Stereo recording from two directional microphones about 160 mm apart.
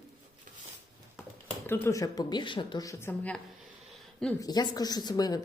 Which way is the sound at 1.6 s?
15° left (ahead or behind).